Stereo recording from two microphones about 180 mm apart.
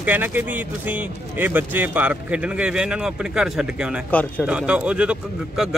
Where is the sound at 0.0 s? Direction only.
10° right (ahead or behind).